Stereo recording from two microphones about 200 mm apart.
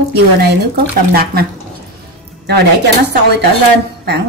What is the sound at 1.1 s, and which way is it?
Speech, 50° right (ahead or behind).